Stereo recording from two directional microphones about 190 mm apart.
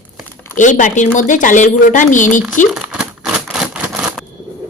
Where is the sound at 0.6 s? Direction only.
40° left (ahead or behind).